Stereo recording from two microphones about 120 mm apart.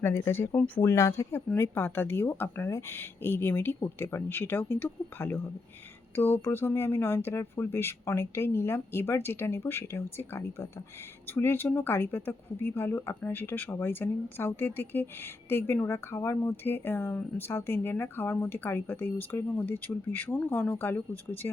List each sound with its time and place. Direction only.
0.0 s speech: 20° left (ahead or behind)